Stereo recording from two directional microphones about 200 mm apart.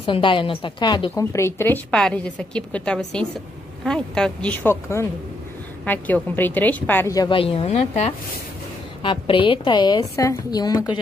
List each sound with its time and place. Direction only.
0.0 s a woman's voice: 25° left (ahead or behind)